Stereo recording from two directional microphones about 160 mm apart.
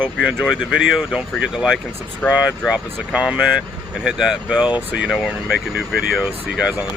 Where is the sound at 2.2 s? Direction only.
10° left (ahead or behind).